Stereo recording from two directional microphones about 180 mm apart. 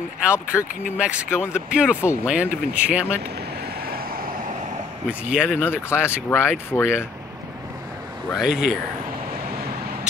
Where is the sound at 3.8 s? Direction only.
55° right (ahead or behind).